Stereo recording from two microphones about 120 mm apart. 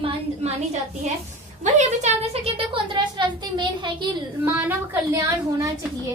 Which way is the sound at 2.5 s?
45° right (ahead or behind).